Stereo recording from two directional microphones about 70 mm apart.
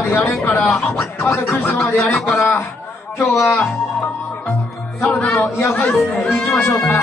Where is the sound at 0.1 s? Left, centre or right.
Left.